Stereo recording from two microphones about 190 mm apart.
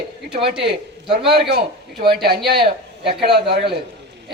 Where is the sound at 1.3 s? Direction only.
55° right (ahead or behind).